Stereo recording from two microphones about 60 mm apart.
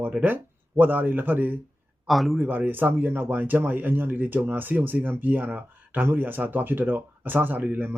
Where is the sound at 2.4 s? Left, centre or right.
Right.